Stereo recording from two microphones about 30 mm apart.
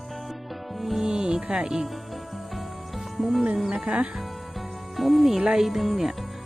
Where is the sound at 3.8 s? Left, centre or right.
Right.